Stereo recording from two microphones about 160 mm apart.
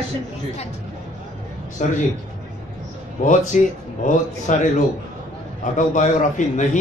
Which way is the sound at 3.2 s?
55° left (ahead or behind).